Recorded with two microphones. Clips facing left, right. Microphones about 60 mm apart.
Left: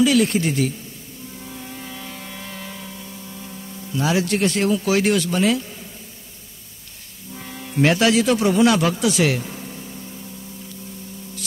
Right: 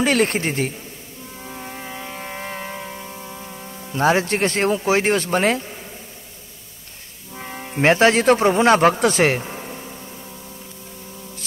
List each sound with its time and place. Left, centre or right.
0.0 s a man's voice: right
1.4 s a sound: right
7.3 s speech: right